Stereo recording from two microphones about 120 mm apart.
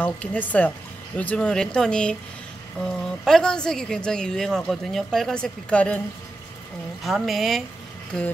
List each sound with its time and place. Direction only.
0.0 s speech: 15° left (ahead or behind)
7.0 s speech: centre (ahead or behind)